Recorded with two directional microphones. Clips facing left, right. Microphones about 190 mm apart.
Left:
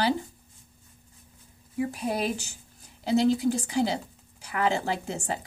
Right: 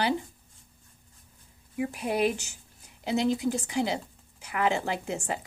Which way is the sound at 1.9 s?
35° left (ahead or behind).